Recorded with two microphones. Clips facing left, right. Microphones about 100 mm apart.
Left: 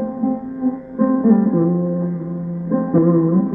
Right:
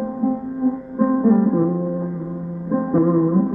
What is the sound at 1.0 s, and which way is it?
Music, 25° right (ahead or behind).